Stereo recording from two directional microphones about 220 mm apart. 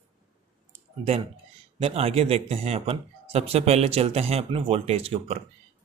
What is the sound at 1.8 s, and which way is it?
Speech, 25° right (ahead or behind).